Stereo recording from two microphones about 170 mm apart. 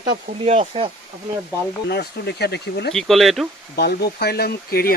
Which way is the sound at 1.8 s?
75° left (ahead or behind).